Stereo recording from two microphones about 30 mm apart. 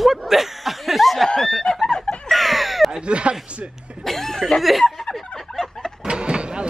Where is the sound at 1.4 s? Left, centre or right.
Centre.